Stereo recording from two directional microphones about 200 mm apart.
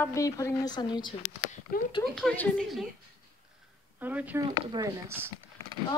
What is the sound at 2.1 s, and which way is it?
Speech, centre (ahead or behind).